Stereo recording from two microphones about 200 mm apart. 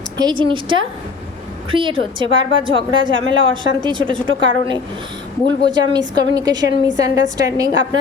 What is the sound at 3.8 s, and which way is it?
Speech, 25° right (ahead or behind).